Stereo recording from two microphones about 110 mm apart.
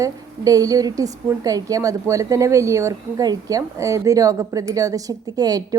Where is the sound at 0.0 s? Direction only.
35° right (ahead or behind).